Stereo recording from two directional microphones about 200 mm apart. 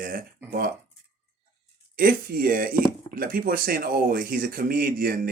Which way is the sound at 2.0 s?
50° right (ahead or behind).